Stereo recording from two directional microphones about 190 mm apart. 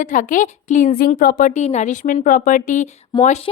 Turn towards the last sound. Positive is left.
turn(degrees=35)  # may be behind; listen again after turning